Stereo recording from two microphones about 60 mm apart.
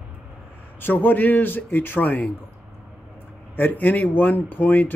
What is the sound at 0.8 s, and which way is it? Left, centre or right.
Speech, left.